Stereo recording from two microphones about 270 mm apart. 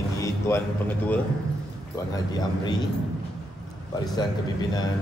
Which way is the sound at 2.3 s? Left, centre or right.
Centre.